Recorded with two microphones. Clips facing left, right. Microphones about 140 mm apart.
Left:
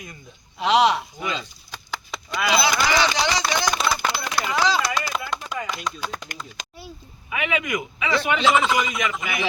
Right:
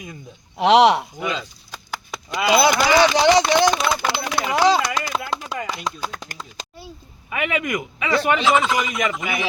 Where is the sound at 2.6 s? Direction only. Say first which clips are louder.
Right 6 dB; 50° right (ahead or behind).